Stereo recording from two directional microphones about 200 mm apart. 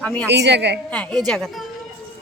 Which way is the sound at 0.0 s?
5° left (ahead or behind).